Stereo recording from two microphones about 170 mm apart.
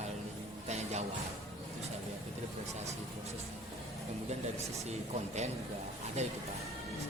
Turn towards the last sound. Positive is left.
turn(degrees=-40)  # may be behind; listen again after turning